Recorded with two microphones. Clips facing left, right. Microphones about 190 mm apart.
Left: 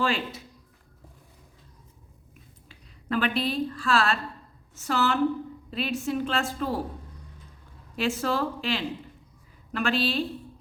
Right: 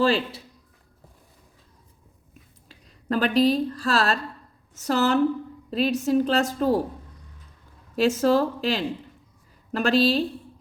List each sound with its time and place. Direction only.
0.0 s a woman's voice: 35° right (ahead or behind)
2.6 s a woman's voice: 40° right (ahead or behind)
7.9 s a woman's voice: 40° right (ahead or behind)